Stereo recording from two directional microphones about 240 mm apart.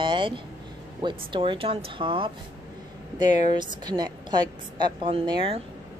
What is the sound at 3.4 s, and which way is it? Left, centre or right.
A woman's voice, centre.